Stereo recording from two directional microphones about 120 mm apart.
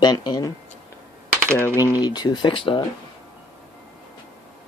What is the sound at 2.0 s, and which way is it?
Speech, 35° left (ahead or behind).